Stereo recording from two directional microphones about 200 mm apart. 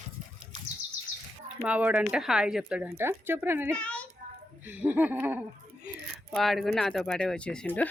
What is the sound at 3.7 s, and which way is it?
Children playing, 5° left (ahead or behind).